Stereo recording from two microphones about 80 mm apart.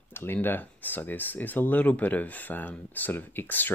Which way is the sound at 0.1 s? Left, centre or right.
Left.